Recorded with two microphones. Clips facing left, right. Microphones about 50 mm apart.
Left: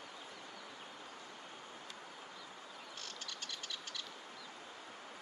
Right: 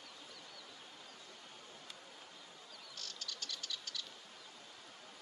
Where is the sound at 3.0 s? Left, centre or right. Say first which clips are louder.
Even; left.